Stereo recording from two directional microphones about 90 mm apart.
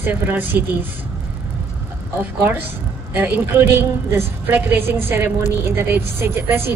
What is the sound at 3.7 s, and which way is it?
A woman's voice, 25° right (ahead or behind).